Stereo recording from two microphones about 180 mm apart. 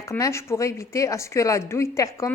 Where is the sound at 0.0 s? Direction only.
15° left (ahead or behind).